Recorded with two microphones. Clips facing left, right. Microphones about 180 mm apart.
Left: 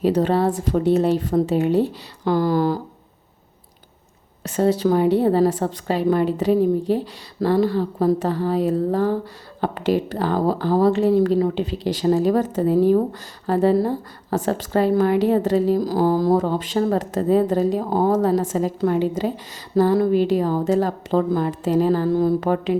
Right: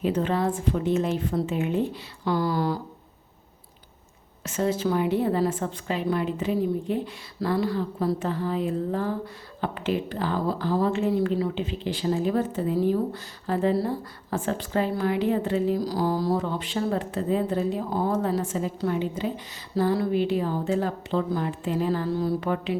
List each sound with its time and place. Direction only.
0.0 s a woman's voice: 35° left (ahead or behind)
2.2 s a woman's voice: 45° left (ahead or behind)
4.4 s a woman's voice: 35° left (ahead or behind)